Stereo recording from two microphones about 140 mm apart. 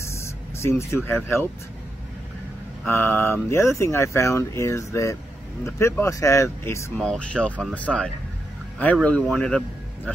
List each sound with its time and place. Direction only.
0.0 s vehicle: 20° left (ahead or behind)
2.9 s speech: 15° left (ahead or behind)
7.0 s speech: 5° left (ahead or behind)